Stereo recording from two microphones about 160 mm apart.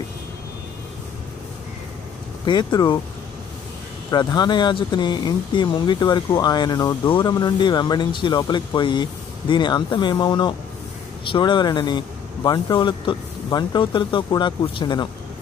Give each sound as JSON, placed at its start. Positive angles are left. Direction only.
{"t": 2.4, "sound": "speech", "side_deg": 25}
{"t": 4.1, "sound": "speech", "side_deg": 25}